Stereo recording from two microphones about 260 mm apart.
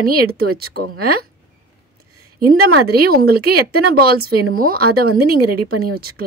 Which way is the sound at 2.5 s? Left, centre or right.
Right.